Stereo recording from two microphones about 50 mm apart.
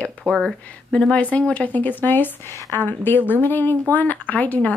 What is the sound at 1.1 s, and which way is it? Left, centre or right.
A woman's voice, left.